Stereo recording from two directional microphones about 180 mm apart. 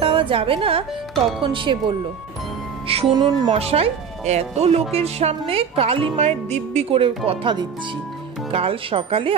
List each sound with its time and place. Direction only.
0.0 s a woman's voice: 30° right (ahead or behind)